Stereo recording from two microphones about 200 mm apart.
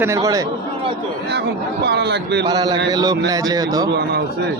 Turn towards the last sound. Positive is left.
turn(degrees=-20)  # may be behind; listen again after turning